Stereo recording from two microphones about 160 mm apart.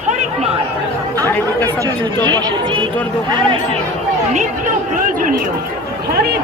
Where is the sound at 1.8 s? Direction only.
25° right (ahead or behind).